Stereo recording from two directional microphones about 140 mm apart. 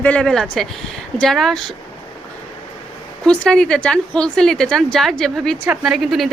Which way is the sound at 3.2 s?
5° left (ahead or behind).